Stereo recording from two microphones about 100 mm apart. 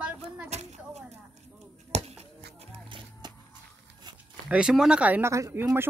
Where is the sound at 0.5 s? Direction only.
90° right.